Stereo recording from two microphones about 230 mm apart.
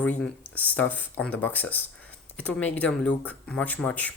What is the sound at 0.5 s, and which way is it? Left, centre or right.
Speech, centre.